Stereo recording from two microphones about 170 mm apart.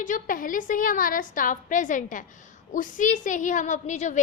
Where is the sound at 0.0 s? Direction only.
50° left (ahead or behind).